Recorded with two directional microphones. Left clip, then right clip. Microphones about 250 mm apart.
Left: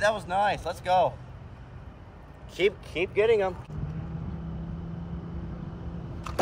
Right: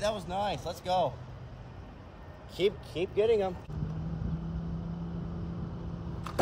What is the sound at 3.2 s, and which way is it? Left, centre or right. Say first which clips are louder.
Speech: left 4 dB; centre.